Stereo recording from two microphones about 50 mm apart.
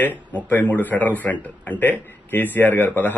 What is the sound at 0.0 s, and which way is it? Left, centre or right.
A man's voice, left.